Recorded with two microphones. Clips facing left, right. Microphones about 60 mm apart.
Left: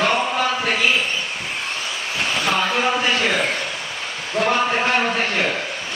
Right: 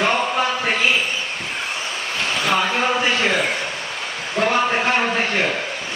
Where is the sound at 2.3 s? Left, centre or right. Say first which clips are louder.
Right 1 dB; centre.